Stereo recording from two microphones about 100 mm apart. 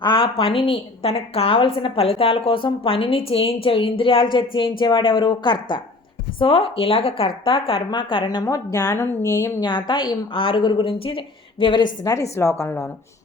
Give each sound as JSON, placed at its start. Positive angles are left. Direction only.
{"t": 0.0, "sound": "a sound", "side_deg": 45}
{"t": 0.3, "sound": "a woman's voice", "side_deg": 65}
{"t": 6.4, "sound": "a woman's voice", "side_deg": 65}
{"t": 7.9, "sound": "a woman's voice", "side_deg": 50}
{"t": 9.6, "sound": "a woman's voice", "side_deg": 50}
{"t": 12.0, "sound": "a woman's voice", "side_deg": 30}